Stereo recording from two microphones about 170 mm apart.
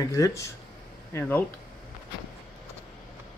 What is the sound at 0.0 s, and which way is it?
Speech, 20° left (ahead or behind).